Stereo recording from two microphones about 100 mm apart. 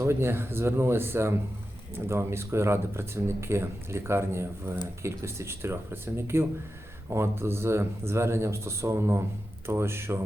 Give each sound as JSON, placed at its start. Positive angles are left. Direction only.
{"t": 0.0, "sound": "speech", "side_deg": -25}